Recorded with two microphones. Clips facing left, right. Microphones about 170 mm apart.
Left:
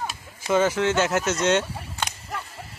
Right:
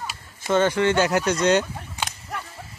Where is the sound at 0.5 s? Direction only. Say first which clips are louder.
Right 1 dB; 5° left (ahead or behind).